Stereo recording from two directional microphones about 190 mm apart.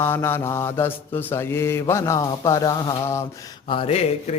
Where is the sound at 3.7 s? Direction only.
30° left (ahead or behind).